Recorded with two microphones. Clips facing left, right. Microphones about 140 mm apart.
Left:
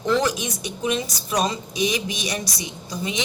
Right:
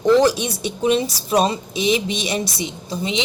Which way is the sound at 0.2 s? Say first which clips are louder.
Right 7 dB; 30° right (ahead or behind).